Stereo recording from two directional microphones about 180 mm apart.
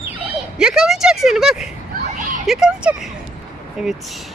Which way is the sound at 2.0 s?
45° right (ahead or behind).